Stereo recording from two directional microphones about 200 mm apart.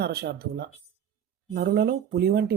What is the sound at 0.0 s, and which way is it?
Speech, 50° right (ahead or behind).